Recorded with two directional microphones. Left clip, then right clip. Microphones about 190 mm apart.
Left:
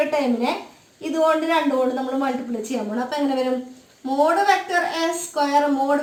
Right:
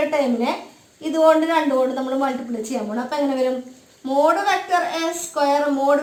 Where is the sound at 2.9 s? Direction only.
20° right (ahead or behind).